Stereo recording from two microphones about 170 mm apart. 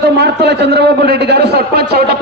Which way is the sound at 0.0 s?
80° right.